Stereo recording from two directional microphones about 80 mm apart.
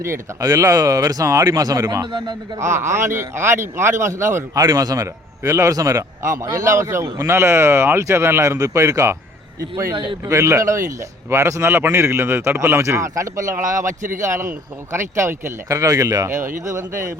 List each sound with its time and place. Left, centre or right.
0.0 s a man's voice: right
2.6 s speech: right
4.5 s a man's voice: right
10.2 s speech: right